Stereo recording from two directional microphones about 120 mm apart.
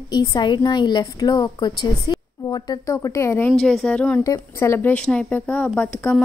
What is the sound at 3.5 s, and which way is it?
Speech, 5° left (ahead or behind).